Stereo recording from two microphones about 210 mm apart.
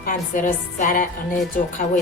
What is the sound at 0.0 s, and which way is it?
A woman's voice, 40° left (ahead or behind).